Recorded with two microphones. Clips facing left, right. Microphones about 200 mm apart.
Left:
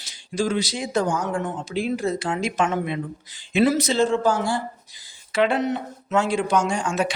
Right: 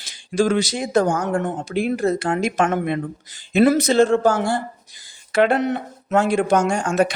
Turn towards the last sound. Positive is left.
turn(degrees=-50)  # may be behind; listen again after turning